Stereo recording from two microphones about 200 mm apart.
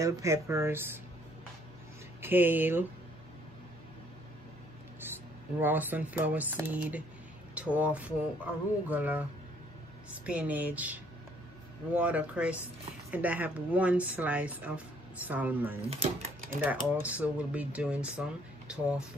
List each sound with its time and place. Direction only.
0.0 s speech: 15° right (ahead or behind)
2.2 s speech: 10° right (ahead or behind)
5.6 s speech: 10° right (ahead or behind)
15.9 s speech: 30° right (ahead or behind)
16.6 s speech: 5° right (ahead or behind)